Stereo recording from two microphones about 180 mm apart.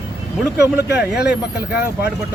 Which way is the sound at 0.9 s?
10° right (ahead or behind).